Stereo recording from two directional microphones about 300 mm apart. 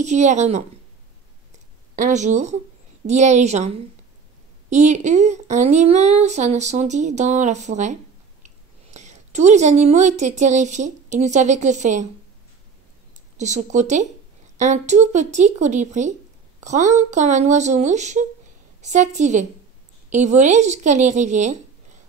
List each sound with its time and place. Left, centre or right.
0.0 s a woman's voice: right
2.0 s a woman's voice: right
8.9 s a woman's voice: right
13.4 s a woman's voice: right